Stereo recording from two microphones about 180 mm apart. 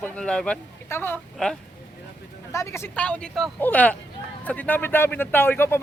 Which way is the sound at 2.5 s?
15° left (ahead or behind).